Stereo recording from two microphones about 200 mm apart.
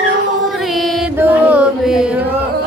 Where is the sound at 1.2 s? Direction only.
10° right (ahead or behind).